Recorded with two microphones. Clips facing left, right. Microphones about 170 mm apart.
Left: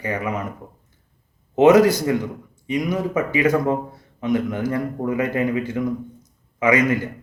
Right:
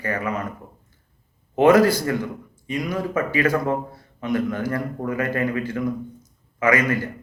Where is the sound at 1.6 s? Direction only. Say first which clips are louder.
Left 2 dB; 20° left (ahead or behind).